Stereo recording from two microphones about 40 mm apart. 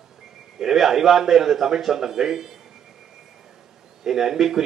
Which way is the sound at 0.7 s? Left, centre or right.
Centre.